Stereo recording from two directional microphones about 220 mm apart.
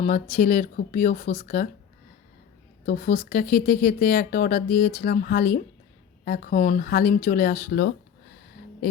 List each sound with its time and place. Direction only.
0.0 s speech: 35° left (ahead or behind)
2.8 s speech: 40° left (ahead or behind)